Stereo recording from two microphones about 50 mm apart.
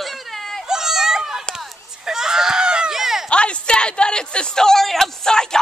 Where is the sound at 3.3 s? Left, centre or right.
Left.